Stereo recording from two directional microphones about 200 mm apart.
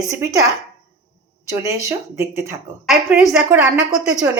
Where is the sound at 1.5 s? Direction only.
15° right (ahead or behind).